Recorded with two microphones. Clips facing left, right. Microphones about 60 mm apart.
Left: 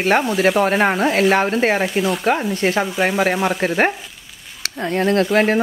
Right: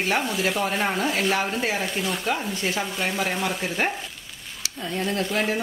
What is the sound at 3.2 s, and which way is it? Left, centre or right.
Speech, left.